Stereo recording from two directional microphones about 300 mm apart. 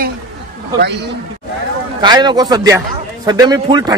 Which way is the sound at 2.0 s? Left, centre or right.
Centre.